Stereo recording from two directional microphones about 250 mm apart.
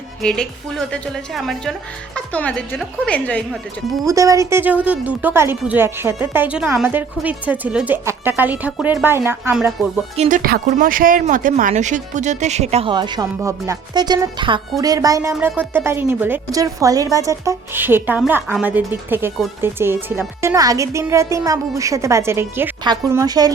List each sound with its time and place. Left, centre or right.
0.2 s speech: centre
4.0 s speech: centre
10.2 s speech: right; by 23.5 s centre